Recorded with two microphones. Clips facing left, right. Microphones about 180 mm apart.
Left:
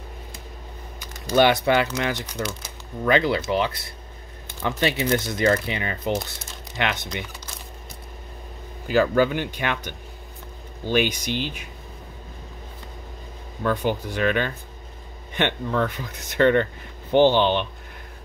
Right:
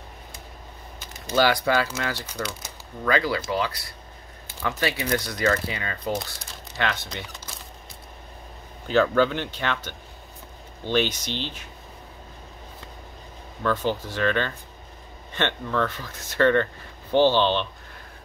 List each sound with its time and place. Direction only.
1.3 s speech: 20° left (ahead or behind)
8.8 s speech: 5° left (ahead or behind)
13.6 s speech: 15° left (ahead or behind)